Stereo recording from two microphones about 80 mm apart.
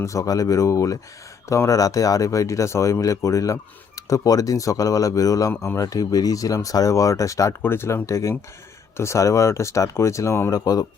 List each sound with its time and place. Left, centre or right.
0.0 s speech: left
7.6 s speech: left
10.5 s speech: left